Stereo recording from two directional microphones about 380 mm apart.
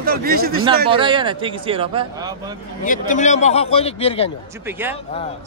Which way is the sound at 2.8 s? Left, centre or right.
Centre.